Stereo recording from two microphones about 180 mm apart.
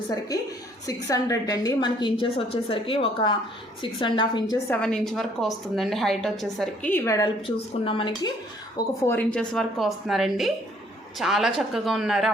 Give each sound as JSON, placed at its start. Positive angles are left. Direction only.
{"t": 1.0, "sound": "a woman's voice", "side_deg": 20}
{"t": 4.5, "sound": "a woman's voice", "side_deg": 5}
{"t": 7.4, "sound": "a woman's voice", "side_deg": 30}
{"t": 9.0, "sound": "a woman's voice", "side_deg": 10}